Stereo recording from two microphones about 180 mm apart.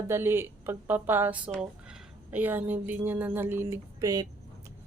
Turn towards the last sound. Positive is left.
turn(degrees=-20)  # may be behind; listen again after turning